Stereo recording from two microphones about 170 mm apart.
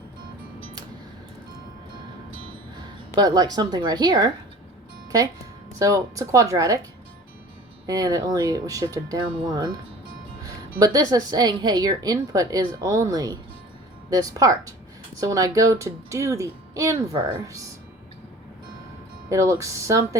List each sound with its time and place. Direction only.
3.2 s a woman's voice: 20° right (ahead or behind)
5.8 s a woman's voice: 20° right (ahead or behind)
7.9 s a woman's voice: 20° right (ahead or behind)
10.4 s a woman's voice: 20° right (ahead or behind)
19.3 s speech: 15° right (ahead or behind)